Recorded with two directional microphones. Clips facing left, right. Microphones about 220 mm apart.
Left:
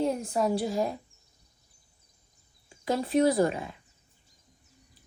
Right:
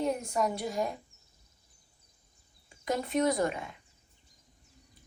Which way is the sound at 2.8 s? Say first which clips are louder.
Left 4 dB; 30° left (ahead or behind).